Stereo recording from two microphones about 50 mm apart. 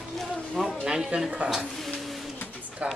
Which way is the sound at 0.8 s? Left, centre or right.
Centre.